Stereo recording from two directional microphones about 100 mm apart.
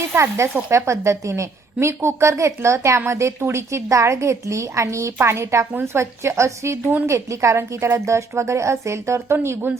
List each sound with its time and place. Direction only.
0.2 s a woman's voice: 30° right (ahead or behind)